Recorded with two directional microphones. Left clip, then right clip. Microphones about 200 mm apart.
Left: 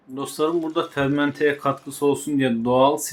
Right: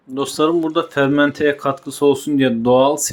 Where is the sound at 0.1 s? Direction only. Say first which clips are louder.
Right 6 dB; 25° right (ahead or behind).